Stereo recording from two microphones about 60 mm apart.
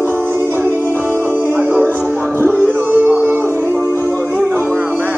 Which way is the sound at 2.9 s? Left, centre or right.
Right.